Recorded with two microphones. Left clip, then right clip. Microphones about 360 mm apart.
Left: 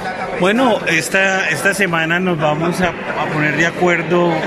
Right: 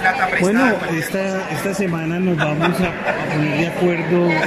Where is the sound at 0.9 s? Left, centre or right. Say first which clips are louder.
Left 7 dB; left.